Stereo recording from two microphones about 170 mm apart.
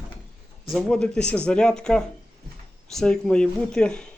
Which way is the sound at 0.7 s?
5° left (ahead or behind).